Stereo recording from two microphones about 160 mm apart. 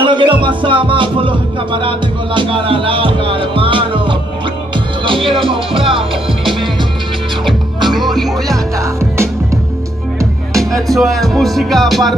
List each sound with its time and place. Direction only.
0.0 s music: 30° right (ahead or behind)
4.7 s speech: 30° right (ahead or behind)
7.4 s music: centre (ahead or behind)
8.7 s music: 20° right (ahead or behind)
10.6 s music: centre (ahead or behind)